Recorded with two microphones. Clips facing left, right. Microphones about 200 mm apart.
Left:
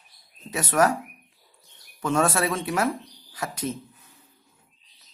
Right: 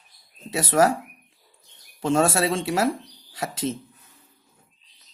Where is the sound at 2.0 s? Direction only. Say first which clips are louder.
Right 2 dB; 30° right (ahead or behind).